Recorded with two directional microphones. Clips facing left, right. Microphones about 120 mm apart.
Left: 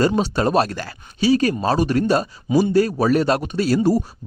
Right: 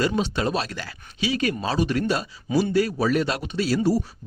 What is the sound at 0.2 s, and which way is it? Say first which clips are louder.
Speech: left 6 dB; 45° left (ahead or behind).